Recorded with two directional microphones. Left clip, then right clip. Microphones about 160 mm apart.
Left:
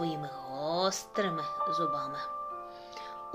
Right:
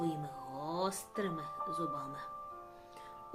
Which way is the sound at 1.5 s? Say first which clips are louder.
Left 9 dB; 25° left (ahead or behind).